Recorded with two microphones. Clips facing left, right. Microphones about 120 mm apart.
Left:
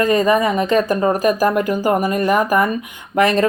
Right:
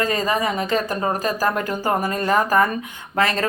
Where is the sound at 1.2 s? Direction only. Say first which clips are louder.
Left 6 dB; 15° left (ahead or behind).